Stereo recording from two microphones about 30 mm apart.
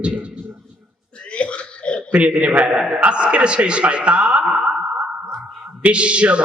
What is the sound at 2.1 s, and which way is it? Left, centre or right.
A man's voice, right.